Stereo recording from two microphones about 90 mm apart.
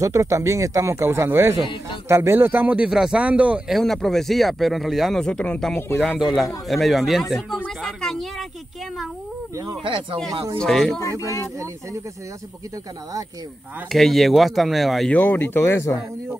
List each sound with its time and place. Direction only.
0.0 s speech: 35° right (ahead or behind); by 2.9 s 20° right (ahead or behind)
2.9 s speech: 5° right (ahead or behind)
3.7 s a man's voice: 5° left (ahead or behind)
5.2 s speech: 10° left (ahead or behind)
5.9 s a man's voice: centre (ahead or behind)
7.8 s a sound: 5° left (ahead or behind)
9.8 s speech: 70° right (ahead or behind)
10.6 s a man's voice: 5° left (ahead or behind)
11.0 s speech: 35° left (ahead or behind)
13.9 s a man's voice: centre (ahead or behind)
15.0 s speech: 20° left (ahead or behind)